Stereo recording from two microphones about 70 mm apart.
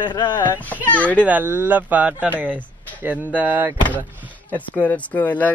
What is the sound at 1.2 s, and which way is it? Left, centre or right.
Speech, right.